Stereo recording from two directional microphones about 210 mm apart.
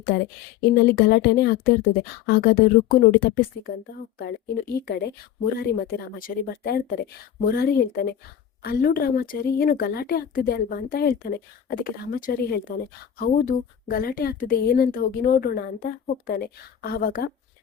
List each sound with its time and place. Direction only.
0.7 s a woman's voice: 50° left (ahead or behind)